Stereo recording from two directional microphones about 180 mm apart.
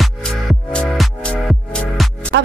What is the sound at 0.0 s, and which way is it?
Music, centre (ahead or behind).